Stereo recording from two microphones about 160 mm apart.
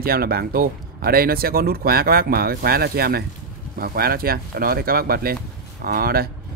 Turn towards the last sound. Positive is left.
turn(degrees=-70)  # may be behind; listen again after turning